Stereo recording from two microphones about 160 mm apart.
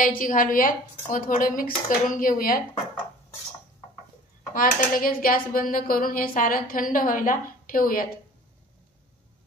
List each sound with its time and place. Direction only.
0.2 s speech: 55° left (ahead or behind)
4.6 s speech: 60° left (ahead or behind)